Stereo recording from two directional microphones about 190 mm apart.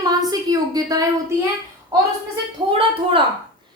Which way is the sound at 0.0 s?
20° right (ahead or behind).